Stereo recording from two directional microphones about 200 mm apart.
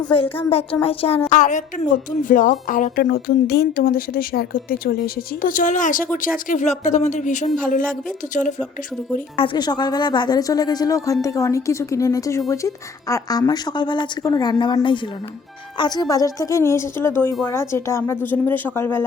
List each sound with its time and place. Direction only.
0.8 s a woman's voice: 30° left (ahead or behind)
9.4 s a woman's voice: 25° left (ahead or behind)